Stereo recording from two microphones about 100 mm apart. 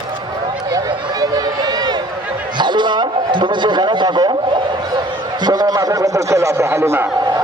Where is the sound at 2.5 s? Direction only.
50° right (ahead or behind).